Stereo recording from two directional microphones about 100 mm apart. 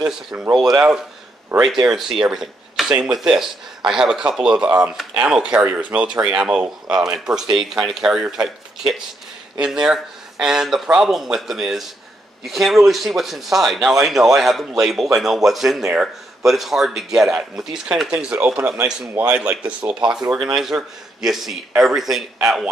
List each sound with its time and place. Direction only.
0.0 s a man's voice: 5° right (ahead or behind)
19.0 s a man's voice: 25° right (ahead or behind)
19.3 s a man's voice: 15° right (ahead or behind)